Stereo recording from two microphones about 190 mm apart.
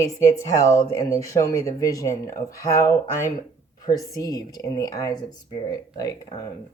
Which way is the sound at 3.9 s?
20° left (ahead or behind).